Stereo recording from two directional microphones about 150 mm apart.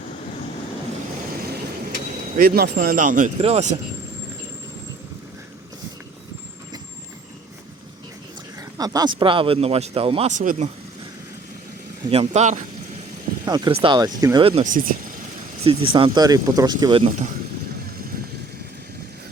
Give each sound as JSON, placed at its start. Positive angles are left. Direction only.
{"t": 2.3, "sound": "speech", "side_deg": -70}
{"t": 3.3, "sound": "speech", "side_deg": -45}
{"t": 8.8, "sound": "speech", "side_deg": -25}
{"t": 12.1, "sound": "speech", "side_deg": -45}
{"t": 13.4, "sound": "speech", "side_deg": -30}
{"t": 14.4, "sound": "speech", "side_deg": -40}
{"t": 14.7, "sound": "speech", "side_deg": -65}
{"t": 15.6, "sound": "speech", "side_deg": -40}
{"t": 17.1, "sound": "speech", "side_deg": -55}